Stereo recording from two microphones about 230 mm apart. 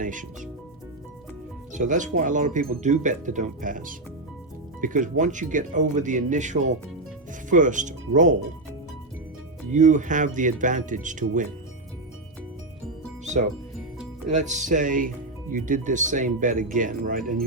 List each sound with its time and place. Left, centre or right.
0.0 s speech: right
1.7 s speech: right
9.7 s speech: right
13.2 s music: right
14.3 s speech: right